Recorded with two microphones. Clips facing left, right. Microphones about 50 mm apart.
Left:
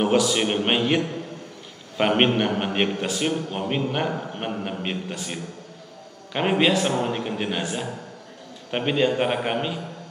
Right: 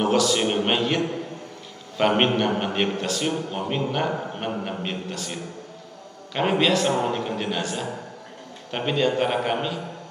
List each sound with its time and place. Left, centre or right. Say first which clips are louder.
0.0 s a man's voice: even; centre
4.1 s a man's voice: right 1 dB; centre
4.8 s a man's voice: left 1 dB; centre